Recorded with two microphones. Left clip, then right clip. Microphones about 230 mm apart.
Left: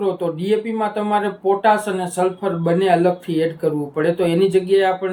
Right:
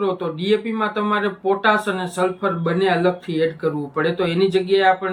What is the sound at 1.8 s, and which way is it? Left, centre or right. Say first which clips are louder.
Speech: left 1 dB; centre.